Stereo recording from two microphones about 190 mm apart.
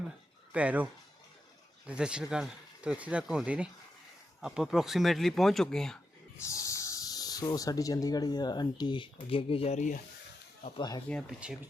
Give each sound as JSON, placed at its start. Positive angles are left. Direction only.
{"t": 0.5, "sound": "speech", "side_deg": -5}
{"t": 1.9, "sound": "speech", "side_deg": -5}
{"t": 6.3, "sound": "speech", "side_deg": 15}
{"t": 10.6, "sound": "speech", "side_deg": 20}
{"t": 11.1, "sound": "speech", "side_deg": -5}